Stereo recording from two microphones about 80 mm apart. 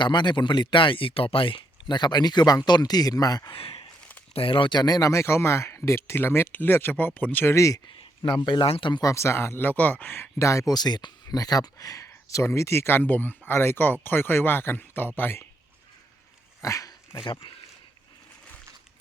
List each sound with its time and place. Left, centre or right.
0.0 s speech: left
4.5 s speech: left
5.2 s speech: left
7.5 s speech: left
8.2 s speech: left
9.0 s speech: left
10.4 s speech: left
10.8 s speech: left
12.0 s speech: left
16.6 s dog: left